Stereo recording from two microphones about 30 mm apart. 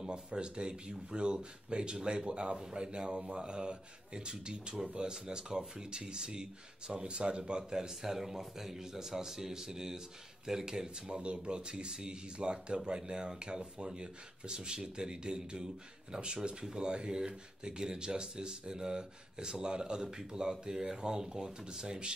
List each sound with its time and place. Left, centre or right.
0.0 s speech: right
7.7 s speech: centre
11.4 s speech: right